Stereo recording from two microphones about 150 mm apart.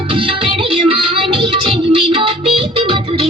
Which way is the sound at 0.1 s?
35° right (ahead or behind).